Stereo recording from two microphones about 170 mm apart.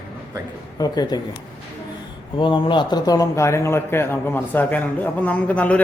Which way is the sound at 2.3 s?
30° left (ahead or behind).